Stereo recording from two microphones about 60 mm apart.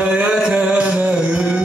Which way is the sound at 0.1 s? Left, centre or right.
Centre.